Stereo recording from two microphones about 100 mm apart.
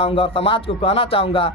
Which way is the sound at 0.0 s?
65° left (ahead or behind).